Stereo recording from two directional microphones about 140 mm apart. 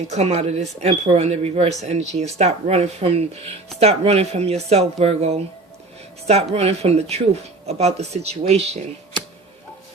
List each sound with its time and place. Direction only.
0.1 s speech: 55° right (ahead or behind)
6.5 s speech: 45° right (ahead or behind)